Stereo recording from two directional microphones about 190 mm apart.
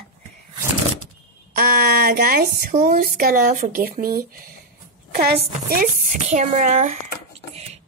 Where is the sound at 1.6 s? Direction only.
55° right (ahead or behind).